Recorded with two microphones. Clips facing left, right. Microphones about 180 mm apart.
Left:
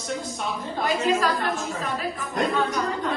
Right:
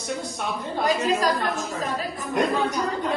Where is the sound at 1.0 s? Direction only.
40° right (ahead or behind).